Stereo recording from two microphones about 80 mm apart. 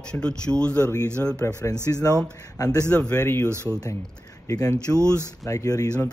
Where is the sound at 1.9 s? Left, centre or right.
Left.